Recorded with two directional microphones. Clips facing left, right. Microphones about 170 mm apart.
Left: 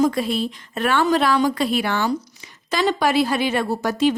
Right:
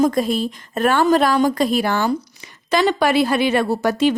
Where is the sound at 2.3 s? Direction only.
60° right (ahead or behind).